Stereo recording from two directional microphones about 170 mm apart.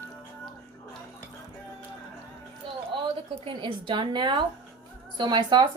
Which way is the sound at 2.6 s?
30° right (ahead or behind).